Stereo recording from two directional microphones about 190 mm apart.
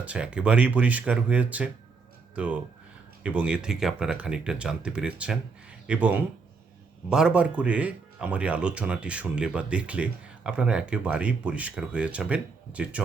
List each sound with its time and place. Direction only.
0.0 s speech: 5° right (ahead or behind)